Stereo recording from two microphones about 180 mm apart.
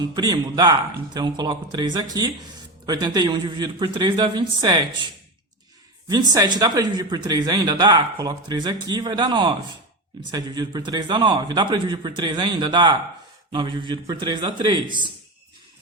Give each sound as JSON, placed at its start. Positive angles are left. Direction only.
{"t": 0.2, "sound": "speech", "side_deg": -20}